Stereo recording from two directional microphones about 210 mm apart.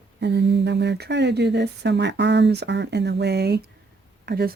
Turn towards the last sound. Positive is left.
turn(degrees=-50)  # may be behind; listen again after turning